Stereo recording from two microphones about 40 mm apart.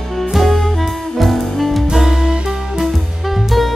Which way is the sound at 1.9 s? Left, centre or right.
Centre.